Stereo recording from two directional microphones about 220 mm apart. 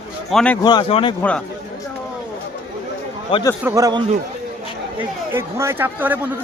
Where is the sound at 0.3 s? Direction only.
5° left (ahead or behind).